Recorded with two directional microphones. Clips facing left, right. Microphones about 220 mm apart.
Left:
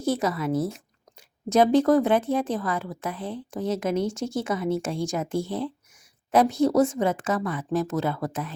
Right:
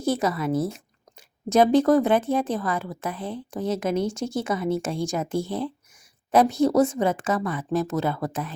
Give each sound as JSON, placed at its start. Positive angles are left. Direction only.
{"t": 0.0, "sound": "speech", "side_deg": -35}